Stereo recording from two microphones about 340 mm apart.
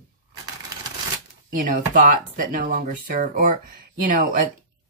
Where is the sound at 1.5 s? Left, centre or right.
Right.